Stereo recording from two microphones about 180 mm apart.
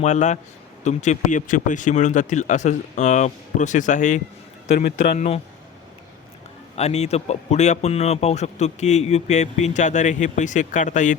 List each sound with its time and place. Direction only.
0.0 s a man's voice: 40° left (ahead or behind)
6.7 s a man's voice: 35° left (ahead or behind)